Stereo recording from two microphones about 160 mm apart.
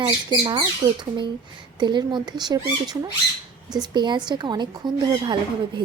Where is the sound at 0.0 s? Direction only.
25° right (ahead or behind).